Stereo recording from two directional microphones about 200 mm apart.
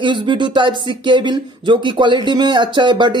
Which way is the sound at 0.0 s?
25° right (ahead or behind).